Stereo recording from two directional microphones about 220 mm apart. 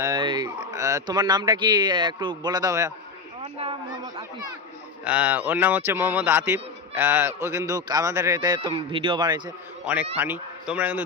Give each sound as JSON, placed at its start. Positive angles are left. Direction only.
{"t": 0.0, "sound": "speech", "side_deg": -20}
{"t": 5.0, "sound": "a man's voice", "side_deg": -5}
{"t": 9.8, "sound": "a man's voice", "side_deg": -5}